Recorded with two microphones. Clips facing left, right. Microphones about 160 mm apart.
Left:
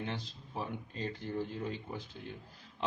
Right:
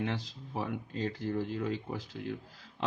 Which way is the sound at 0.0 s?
90° right.